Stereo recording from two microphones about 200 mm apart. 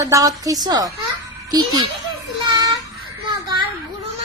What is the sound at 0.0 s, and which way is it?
Speech, 15° right (ahead or behind).